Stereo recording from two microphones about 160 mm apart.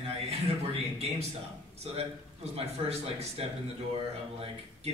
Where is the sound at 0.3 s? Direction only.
40° right (ahead or behind).